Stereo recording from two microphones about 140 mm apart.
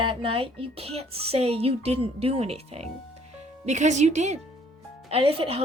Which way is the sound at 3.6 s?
55° right (ahead or behind).